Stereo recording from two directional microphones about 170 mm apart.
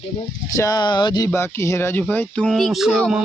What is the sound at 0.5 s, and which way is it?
Speech, 20° left (ahead or behind).